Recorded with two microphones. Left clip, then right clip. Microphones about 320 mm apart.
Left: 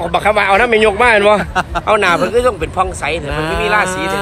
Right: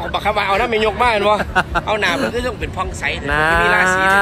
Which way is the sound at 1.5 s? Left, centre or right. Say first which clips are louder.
Left 4 dB; centre.